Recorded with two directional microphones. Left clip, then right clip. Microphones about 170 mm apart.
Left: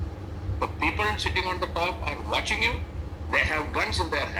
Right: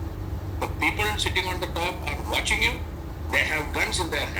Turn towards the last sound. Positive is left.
turn(degrees=-20)  # may be behind; listen again after turning